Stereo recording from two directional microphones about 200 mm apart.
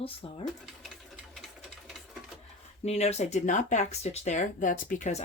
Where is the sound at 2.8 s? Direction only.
30° left (ahead or behind).